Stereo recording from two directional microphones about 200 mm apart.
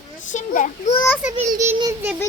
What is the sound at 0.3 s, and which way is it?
Speech, 40° left (ahead or behind).